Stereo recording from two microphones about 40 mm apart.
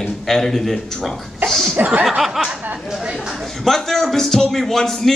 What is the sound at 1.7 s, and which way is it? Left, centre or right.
Speech, right.